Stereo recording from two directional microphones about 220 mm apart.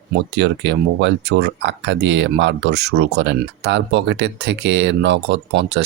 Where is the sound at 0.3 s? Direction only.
50° right (ahead or behind).